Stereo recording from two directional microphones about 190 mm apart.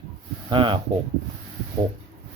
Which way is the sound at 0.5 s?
25° right (ahead or behind).